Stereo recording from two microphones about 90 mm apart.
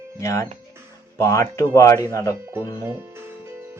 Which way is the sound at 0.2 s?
35° left (ahead or behind).